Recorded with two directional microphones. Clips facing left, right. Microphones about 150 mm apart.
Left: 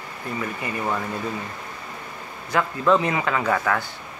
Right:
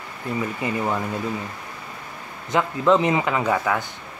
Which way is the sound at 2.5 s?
20° right (ahead or behind).